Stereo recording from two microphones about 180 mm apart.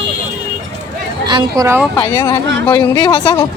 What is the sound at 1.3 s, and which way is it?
Speech, 25° right (ahead or behind).